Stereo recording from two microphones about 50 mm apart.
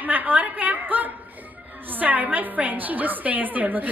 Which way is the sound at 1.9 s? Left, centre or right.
Right.